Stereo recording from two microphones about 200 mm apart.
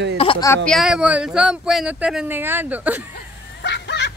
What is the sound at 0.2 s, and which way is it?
Speech, 25° left (ahead or behind).